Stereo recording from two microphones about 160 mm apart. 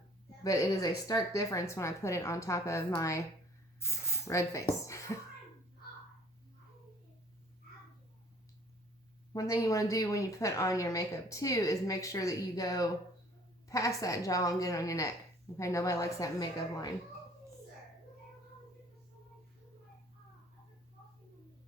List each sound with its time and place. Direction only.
0.4 s a woman's voice: 20° left (ahead or behind)
9.3 s a woman's voice: 20° left (ahead or behind)